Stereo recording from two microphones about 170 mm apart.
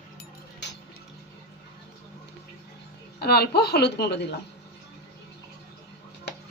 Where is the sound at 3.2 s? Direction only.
65° left (ahead or behind).